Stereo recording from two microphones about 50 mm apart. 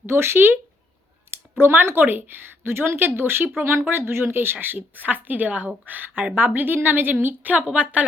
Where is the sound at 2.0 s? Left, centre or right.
Right.